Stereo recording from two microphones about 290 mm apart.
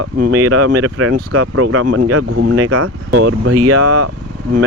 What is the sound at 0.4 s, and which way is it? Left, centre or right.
Speech, right.